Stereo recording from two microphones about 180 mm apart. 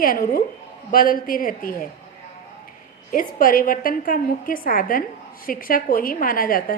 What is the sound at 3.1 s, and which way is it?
A woman's voice, 50° left (ahead or behind).